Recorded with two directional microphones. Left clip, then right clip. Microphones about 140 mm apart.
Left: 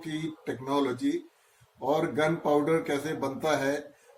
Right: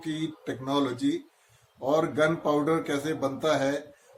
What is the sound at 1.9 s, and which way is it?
Speech, 15° right (ahead or behind).